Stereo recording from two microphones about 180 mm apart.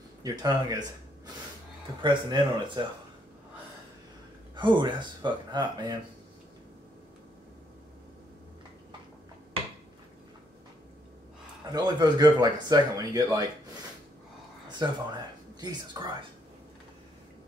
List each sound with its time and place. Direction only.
0.2 s speech: 20° right (ahead or behind)
4.6 s speech: 25° right (ahead or behind)
11.7 s speech: 25° right (ahead or behind)
14.8 s speech: 25° right (ahead or behind)